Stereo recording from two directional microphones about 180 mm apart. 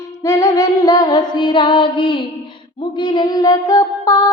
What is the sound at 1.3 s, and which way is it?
Female singing, 25° left (ahead or behind).